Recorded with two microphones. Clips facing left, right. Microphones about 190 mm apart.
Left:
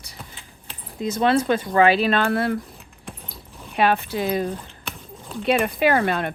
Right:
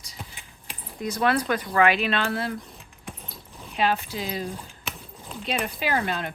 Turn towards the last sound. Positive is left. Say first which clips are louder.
# left 7 dB
turn(degrees=60)  # may be behind; listen again after turning